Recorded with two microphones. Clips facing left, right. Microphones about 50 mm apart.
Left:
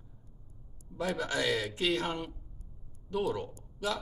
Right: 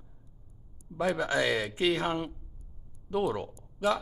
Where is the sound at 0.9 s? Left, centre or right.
Right.